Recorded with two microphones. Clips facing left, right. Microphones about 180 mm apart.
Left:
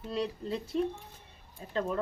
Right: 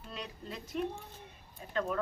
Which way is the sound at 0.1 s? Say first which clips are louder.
Left 10 dB; 30° left (ahead or behind).